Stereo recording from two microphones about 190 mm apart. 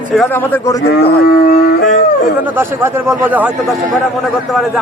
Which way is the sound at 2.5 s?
10° right (ahead or behind).